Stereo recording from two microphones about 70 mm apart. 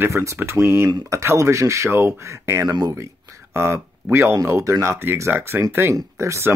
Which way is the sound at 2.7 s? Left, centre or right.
Right.